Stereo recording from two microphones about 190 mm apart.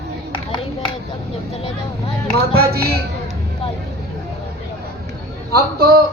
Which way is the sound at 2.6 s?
55° right (ahead or behind).